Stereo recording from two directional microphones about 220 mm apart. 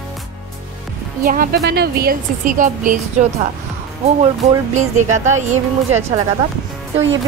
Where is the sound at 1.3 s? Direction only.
40° right (ahead or behind).